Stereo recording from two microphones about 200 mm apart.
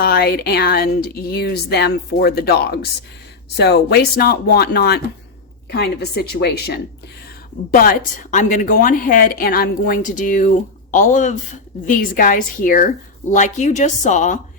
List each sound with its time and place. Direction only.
0.0 s a woman's voice: 50° left (ahead or behind)